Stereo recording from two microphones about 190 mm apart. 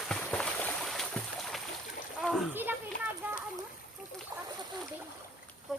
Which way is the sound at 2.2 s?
5° left (ahead or behind).